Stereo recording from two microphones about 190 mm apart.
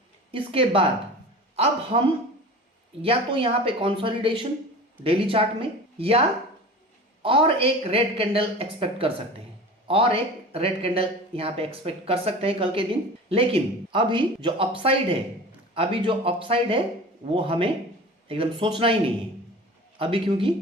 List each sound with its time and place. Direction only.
0.3 s a man's voice: 30° right (ahead or behind)
3.0 s speech: 30° right (ahead or behind)